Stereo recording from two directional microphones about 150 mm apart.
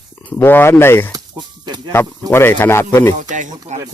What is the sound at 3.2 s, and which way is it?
Speech, 55° right (ahead or behind).